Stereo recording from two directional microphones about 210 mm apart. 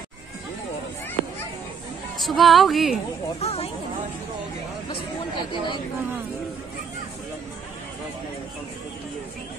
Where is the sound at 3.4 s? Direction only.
30° left (ahead or behind).